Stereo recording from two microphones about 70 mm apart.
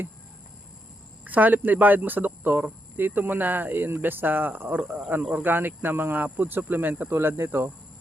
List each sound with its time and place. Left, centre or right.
1.2 s speech: right